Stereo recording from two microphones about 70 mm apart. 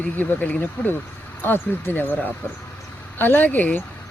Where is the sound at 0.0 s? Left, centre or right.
Left.